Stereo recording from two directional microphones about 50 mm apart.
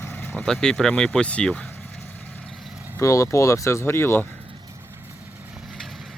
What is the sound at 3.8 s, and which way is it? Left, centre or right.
Speech, left.